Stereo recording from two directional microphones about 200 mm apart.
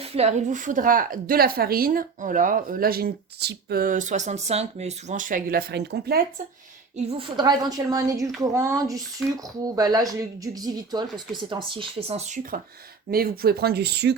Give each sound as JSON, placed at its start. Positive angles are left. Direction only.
{"t": 0.0, "sound": "a woman's voice", "side_deg": -30}
{"t": 6.9, "sound": "a woman's voice", "side_deg": -25}
{"t": 13.1, "sound": "a woman's voice", "side_deg": -50}